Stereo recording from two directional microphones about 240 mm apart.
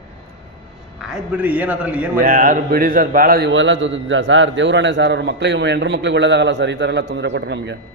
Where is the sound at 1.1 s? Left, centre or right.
Centre.